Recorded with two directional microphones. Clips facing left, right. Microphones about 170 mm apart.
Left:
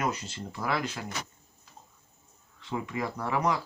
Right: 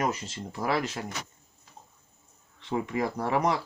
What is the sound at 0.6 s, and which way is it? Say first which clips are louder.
Speech: right 3 dB; 35° right (ahead or behind).